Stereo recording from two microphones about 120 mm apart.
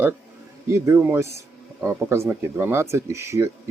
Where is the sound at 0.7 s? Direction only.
20° right (ahead or behind).